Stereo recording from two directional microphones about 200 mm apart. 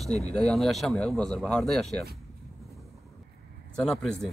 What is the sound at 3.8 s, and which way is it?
Speech, 5° left (ahead or behind).